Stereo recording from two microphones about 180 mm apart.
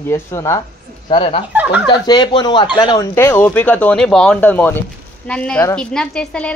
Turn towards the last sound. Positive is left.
turn(degrees=5)  # may be behind; listen again after turning